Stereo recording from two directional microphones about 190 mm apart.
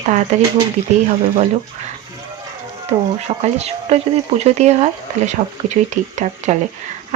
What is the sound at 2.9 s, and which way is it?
Speech, 30° right (ahead or behind).